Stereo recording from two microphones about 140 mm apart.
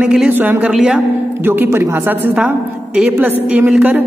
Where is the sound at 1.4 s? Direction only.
15° right (ahead or behind).